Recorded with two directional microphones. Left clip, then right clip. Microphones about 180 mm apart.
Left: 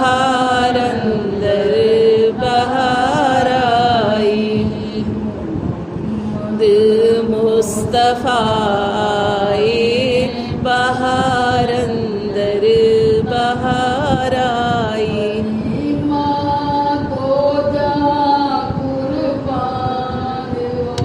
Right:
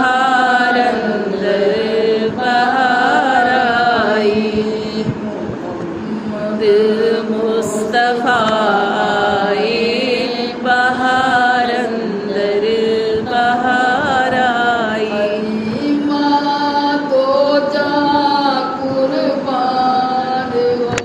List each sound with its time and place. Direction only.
0.0 s chant: 35° left (ahead or behind)
1.7 s mantra: 40° left (ahead or behind)
3.5 s carnatic music: 40° left (ahead or behind)
6.6 s music: 40° left (ahead or behind)
7.9 s a sound: 40° left (ahead or behind)
9.2 s mantra: 40° left (ahead or behind)
10.7 s chant: 40° left (ahead or behind)
13.3 s mantra: 35° left (ahead or behind)